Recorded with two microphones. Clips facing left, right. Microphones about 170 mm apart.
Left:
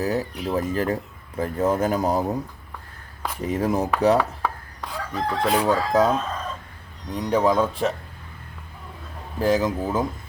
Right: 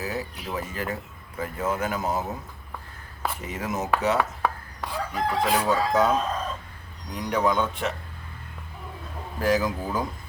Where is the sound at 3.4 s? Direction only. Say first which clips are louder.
Left 10 dB; 35° left (ahead or behind).